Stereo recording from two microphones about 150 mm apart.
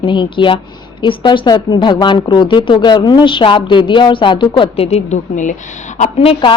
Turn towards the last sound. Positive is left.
turn(degrees=35)  # may be behind; listen again after turning